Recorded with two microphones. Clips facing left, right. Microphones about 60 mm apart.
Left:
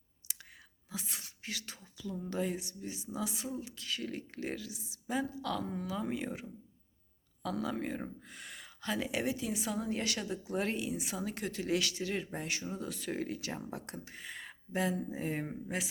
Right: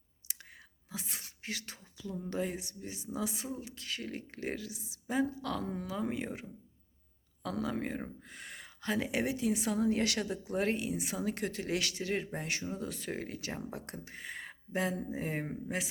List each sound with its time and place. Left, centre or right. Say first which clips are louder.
0.2 s whispering: even; right
0.9 s a sound: even; right
2.3 s speech: left 1 dB; right
7.4 s a woman's voice: even; right
10.0 s a woman's voice: right 4 dB; right
10.4 s speech: right 2 dB; right